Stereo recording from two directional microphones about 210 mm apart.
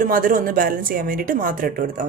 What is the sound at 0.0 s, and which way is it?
Speech, 40° right (ahead or behind).